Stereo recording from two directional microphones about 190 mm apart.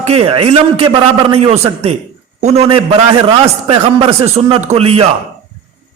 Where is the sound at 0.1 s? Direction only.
30° right (ahead or behind).